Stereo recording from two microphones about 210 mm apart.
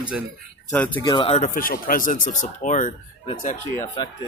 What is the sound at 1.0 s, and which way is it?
Speech, 25° left (ahead or behind).